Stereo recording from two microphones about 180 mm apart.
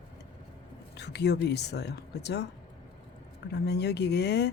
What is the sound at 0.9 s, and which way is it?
Speech, 70° left (ahead or behind).